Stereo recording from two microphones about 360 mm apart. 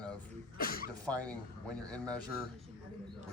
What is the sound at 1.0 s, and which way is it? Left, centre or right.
Speech, centre.